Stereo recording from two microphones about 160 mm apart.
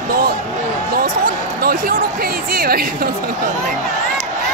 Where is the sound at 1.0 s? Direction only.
65° right (ahead or behind).